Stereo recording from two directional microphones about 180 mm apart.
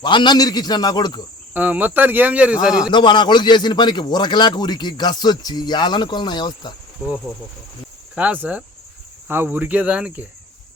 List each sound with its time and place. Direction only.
0.0 s a man's voice: 25° left (ahead or behind)
1.5 s speech: 10° right (ahead or behind)
2.7 s a man's voice: 25° left (ahead or behind)
8.1 s speech: 10° right (ahead or behind)